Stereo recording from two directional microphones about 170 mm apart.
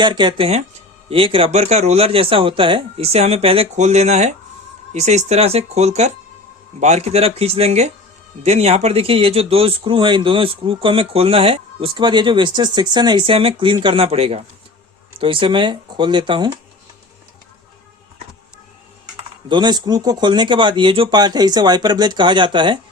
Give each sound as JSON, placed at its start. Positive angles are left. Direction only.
{"t": 0.0, "sound": "speech", "side_deg": -25}
{"t": 19.5, "sound": "speech", "side_deg": -25}